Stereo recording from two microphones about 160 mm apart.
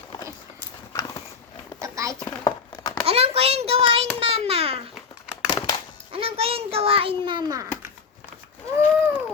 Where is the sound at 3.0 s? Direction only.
35° right (ahead or behind).